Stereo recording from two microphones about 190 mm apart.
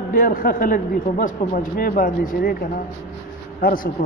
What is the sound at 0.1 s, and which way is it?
A man's voice, 50° left (ahead or behind).